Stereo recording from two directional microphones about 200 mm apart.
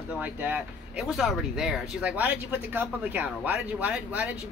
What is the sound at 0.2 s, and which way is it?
A man's voice, 10° right (ahead or behind).